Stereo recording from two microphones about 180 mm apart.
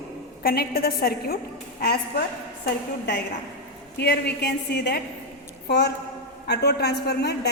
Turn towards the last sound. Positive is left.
turn(degrees=65)  # may be behind; listen again after turning